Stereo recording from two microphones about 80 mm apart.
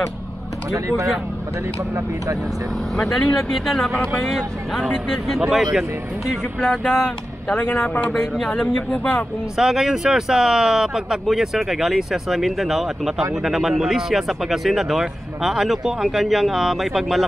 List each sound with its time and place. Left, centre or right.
0.7 s speech: right
3.0 s speech: centre
8.1 s speech: centre
9.6 s speech: centre